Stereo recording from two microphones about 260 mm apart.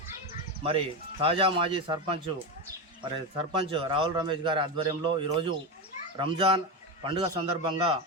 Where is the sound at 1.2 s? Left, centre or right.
Right.